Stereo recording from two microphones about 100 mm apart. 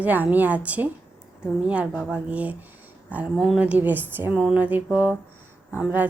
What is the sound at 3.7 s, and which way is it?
A woman's voice, 20° right (ahead or behind).